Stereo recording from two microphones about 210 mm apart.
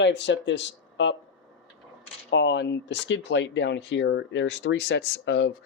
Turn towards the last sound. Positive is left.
turn(degrees=60)  # may be behind; listen again after turning